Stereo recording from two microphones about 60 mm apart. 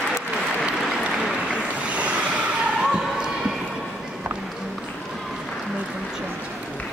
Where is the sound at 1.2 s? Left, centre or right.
Centre.